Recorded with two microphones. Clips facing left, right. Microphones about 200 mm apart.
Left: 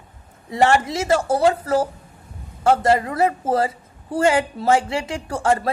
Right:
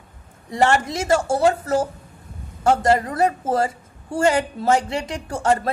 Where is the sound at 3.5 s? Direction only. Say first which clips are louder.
Left 1 dB; 50° right (ahead or behind).